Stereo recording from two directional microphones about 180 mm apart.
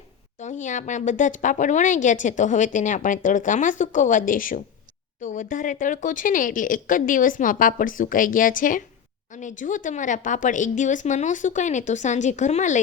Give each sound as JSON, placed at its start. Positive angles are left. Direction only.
{"t": 0.3, "sound": "a woman's voice", "side_deg": 40}